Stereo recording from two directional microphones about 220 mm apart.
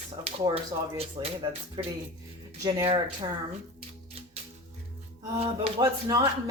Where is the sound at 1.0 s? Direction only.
25° right (ahead or behind).